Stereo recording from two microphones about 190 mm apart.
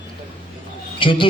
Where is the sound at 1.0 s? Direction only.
25° left (ahead or behind).